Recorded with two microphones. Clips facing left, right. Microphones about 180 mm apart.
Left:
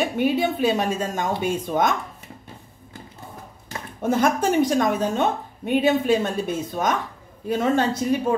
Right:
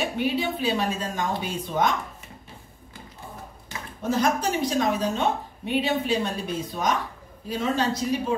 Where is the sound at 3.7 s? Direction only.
55° left (ahead or behind).